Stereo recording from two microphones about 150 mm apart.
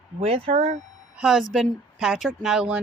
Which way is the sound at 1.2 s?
5° right (ahead or behind).